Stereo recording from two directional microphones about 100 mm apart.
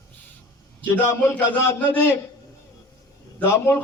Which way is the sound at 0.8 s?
15° left (ahead or behind).